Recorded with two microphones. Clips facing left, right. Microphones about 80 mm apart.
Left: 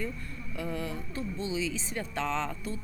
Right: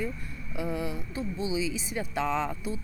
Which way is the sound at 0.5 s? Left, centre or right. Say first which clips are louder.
Right 3 dB; centre.